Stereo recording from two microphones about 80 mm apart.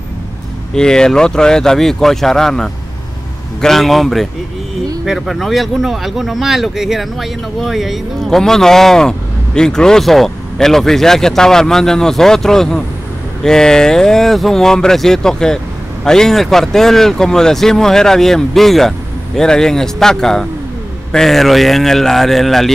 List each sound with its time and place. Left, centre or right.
0.7 s speech: centre